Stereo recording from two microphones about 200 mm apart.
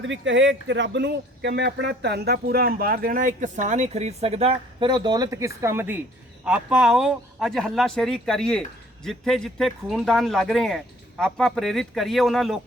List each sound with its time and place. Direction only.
0.0 s speech: 65° right (ahead or behind); by 12.5 s centre (ahead or behind)